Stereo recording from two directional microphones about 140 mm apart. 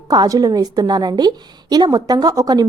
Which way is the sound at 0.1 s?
30° right (ahead or behind).